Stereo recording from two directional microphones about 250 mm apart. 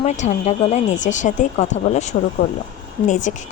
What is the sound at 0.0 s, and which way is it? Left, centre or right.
Speech, left.